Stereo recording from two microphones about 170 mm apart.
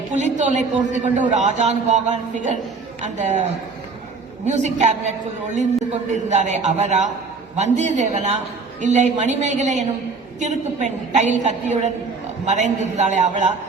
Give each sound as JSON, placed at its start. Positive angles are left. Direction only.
{"t": 0.1, "sound": "a man's voice", "side_deg": -45}
{"t": 4.4, "sound": "a man's voice", "side_deg": -45}